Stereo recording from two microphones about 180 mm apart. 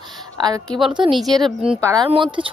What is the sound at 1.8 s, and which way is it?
Speech, 20° right (ahead or behind).